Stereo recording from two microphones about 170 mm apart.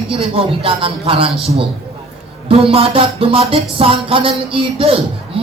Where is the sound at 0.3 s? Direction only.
35° right (ahead or behind).